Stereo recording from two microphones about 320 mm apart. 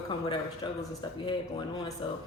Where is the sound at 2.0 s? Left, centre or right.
Centre.